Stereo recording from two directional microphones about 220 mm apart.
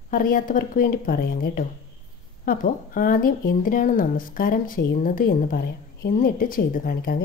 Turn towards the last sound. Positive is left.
turn(degrees=40)  # may be behind; listen again after turning